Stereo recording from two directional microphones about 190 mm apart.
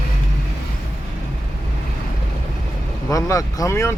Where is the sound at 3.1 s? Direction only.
20° left (ahead or behind).